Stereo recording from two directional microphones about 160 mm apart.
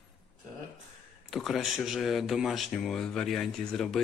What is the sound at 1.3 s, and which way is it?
Speech, centre (ahead or behind).